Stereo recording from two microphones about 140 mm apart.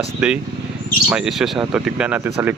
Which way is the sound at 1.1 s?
5° right (ahead or behind).